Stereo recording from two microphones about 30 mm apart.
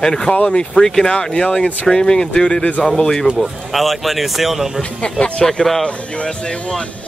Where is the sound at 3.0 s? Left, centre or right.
Left.